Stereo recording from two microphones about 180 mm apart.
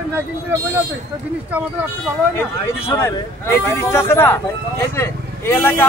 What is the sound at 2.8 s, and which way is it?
Speech, 15° left (ahead or behind).